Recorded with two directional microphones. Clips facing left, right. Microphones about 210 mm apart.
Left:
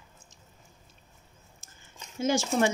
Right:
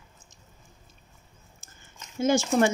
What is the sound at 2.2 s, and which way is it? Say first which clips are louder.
Speech: right 3 dB; 50° right (ahead or behind).